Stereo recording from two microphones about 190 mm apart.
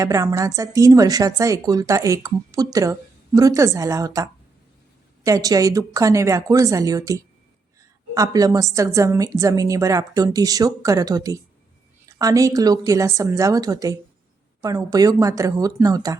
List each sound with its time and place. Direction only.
0.0 s a woman's voice: 15° right (ahead or behind)